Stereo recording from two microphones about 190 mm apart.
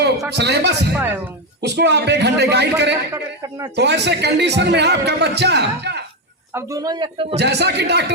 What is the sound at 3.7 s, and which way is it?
Speech, 65° right (ahead or behind).